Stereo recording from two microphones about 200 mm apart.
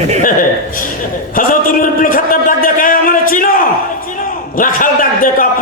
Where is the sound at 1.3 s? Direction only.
45° left (ahead or behind).